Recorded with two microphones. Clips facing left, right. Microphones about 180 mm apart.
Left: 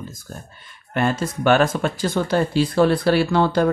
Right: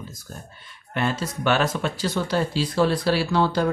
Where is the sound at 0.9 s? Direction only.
50° left (ahead or behind).